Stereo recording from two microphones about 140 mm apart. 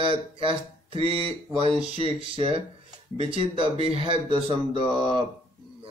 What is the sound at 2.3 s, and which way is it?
Speech, 40° right (ahead or behind).